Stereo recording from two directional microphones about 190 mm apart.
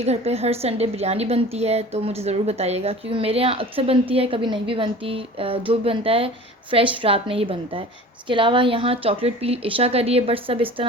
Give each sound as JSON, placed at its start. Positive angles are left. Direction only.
{"t": 0.0, "sound": "a woman's voice", "side_deg": -35}